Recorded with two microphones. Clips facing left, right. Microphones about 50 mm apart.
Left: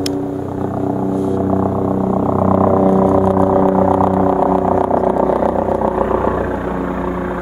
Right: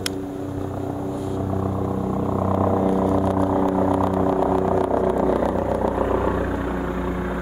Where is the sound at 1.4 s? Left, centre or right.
Left.